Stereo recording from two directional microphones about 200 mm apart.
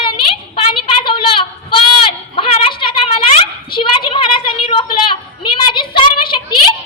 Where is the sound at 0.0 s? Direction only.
25° left (ahead or behind).